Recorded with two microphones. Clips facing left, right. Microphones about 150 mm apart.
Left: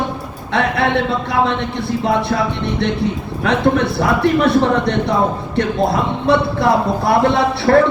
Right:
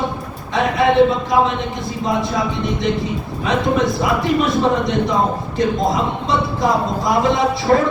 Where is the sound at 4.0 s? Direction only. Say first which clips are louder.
Left 3 dB; 65° left (ahead or behind).